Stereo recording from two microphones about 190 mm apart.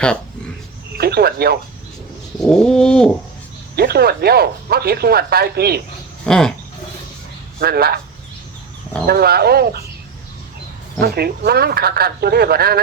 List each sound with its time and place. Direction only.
0.9 s speech: 55° right (ahead or behind)
2.4 s bird: 5° left (ahead or behind)
3.8 s speech: 55° right (ahead or behind)
6.2 s bird: 5° left (ahead or behind)
7.6 s a man's voice: 55° right (ahead or behind)
9.0 s speech: 55° right (ahead or behind)
11.0 s speech: 55° right (ahead or behind)